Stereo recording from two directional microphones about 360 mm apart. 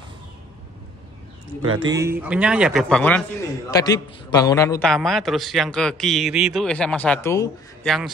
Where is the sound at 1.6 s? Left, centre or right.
Right.